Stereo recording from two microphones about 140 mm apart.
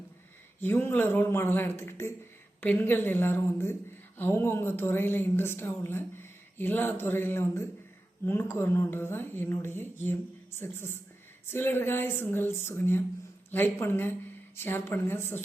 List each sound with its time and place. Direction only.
0.6 s speech: 15° left (ahead or behind)